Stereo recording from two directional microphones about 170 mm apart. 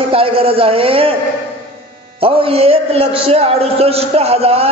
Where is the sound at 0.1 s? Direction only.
35° right (ahead or behind).